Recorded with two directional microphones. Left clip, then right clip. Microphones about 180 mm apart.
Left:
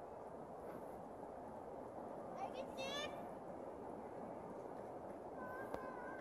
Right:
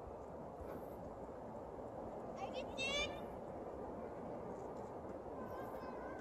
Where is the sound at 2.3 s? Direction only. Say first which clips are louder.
Right 3 dB; 15° right (ahead or behind).